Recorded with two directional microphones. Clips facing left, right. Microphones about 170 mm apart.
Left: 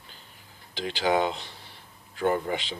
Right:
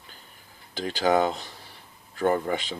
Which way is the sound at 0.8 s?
45° right (ahead or behind).